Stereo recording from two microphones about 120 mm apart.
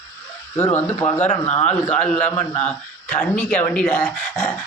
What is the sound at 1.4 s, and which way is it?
Speech, 60° left (ahead or behind).